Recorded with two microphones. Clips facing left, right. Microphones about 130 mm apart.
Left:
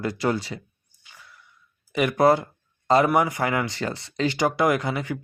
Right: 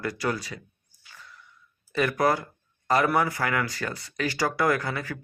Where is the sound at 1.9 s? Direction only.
20° left (ahead or behind).